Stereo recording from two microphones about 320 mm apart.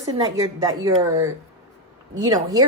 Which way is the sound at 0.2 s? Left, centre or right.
Centre.